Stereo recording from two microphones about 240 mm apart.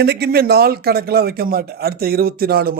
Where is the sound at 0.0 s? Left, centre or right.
Right.